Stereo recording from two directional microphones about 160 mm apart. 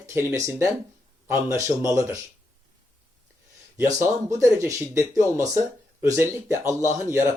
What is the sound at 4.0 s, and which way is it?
Speech, 20° right (ahead or behind).